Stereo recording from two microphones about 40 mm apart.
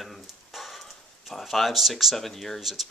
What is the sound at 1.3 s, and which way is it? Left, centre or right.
Speech, centre.